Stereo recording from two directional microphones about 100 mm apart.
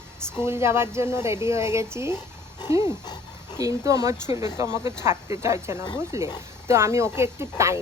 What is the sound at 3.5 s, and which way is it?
Speech, 30° right (ahead or behind).